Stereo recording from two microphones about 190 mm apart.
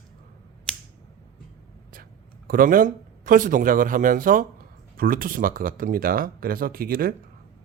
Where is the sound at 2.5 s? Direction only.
45° right (ahead or behind).